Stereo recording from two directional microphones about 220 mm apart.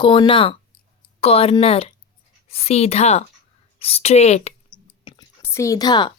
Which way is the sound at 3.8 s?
30° left (ahead or behind).